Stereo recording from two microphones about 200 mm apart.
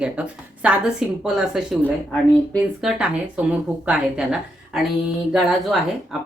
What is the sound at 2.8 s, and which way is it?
Speech, 5° right (ahead or behind).